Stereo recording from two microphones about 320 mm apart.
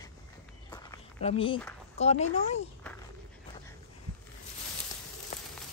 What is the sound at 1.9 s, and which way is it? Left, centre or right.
Speech, centre.